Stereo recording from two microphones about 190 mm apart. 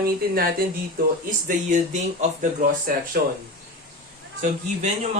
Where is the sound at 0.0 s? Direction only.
55° right (ahead or behind).